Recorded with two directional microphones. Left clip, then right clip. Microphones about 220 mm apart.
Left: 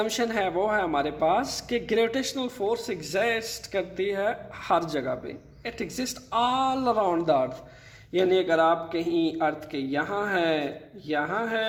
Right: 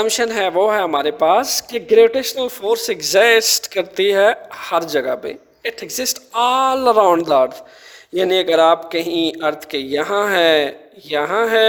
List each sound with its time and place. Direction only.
0.0 s a man's voice: 35° right (ahead or behind); by 11.6 s 50° right (ahead or behind)